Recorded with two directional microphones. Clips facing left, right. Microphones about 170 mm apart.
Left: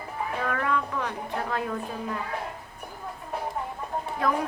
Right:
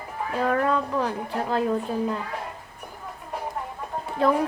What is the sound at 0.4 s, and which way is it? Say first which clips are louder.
A woman's voice: right 6 dB; 35° right (ahead or behind).